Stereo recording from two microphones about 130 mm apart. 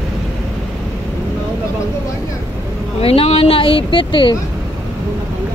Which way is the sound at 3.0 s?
45° left (ahead or behind).